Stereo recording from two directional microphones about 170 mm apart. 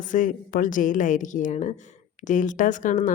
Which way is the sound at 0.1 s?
50° left (ahead or behind).